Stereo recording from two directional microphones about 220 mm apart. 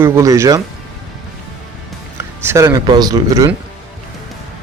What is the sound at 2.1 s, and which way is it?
Speech, 10° right (ahead or behind).